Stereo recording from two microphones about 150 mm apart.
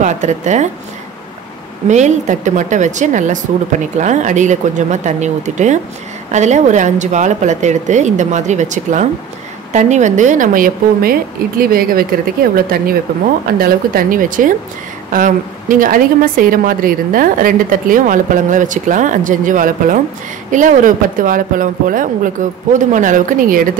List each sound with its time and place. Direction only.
0.0 s speech: 50° right (ahead or behind)
1.9 s a woman's voice: 50° right (ahead or behind)